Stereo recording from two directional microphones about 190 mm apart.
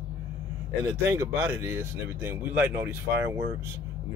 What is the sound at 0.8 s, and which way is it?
Speech, 15° right (ahead or behind).